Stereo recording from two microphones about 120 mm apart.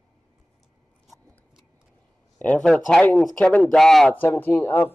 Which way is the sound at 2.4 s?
10° left (ahead or behind).